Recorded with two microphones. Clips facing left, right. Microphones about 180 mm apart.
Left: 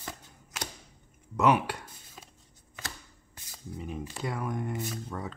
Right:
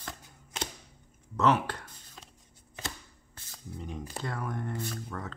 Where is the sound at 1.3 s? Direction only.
15° left (ahead or behind).